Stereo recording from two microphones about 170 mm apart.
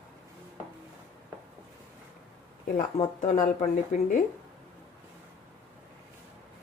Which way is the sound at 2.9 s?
40° left (ahead or behind).